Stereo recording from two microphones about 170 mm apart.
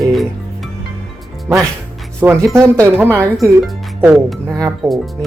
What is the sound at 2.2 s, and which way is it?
A woman's voice, 15° right (ahead or behind).